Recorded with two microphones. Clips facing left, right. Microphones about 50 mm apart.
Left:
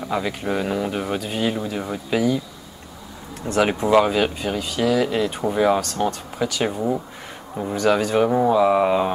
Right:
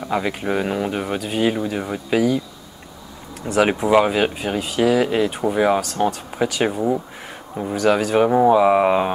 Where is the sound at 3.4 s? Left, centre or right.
Centre.